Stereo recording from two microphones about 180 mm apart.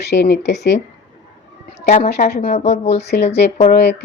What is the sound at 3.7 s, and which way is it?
Speech, 70° left (ahead or behind).